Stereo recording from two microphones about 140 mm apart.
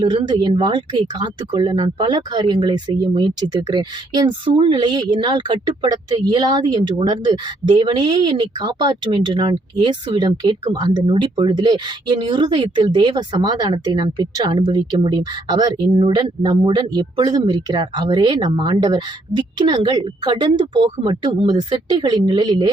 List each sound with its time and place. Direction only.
0.0 s speech: 30° right (ahead or behind)